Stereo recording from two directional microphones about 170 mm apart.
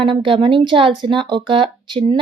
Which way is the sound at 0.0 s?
30° right (ahead or behind).